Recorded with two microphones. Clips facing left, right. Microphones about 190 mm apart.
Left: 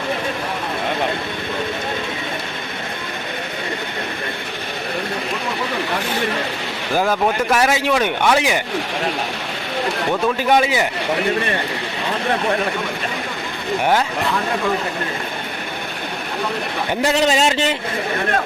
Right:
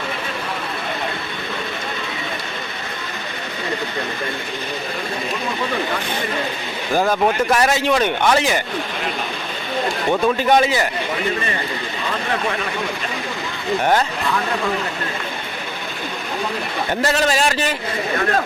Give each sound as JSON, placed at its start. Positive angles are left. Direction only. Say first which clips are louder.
{"t": 7.1, "sound": "speech", "louder": "right 1 dB", "side_deg": 5}
{"t": 10.5, "sound": "speech", "louder": "even", "side_deg": 10}
{"t": 17.0, "sound": "a man's voice", "louder": "left 2 dB", "side_deg": 15}